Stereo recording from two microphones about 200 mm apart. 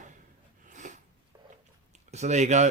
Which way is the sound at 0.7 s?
40° right (ahead or behind).